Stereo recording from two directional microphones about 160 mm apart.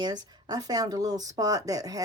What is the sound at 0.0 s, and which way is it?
Speech, 25° right (ahead or behind).